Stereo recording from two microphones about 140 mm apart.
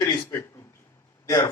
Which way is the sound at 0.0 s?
25° left (ahead or behind).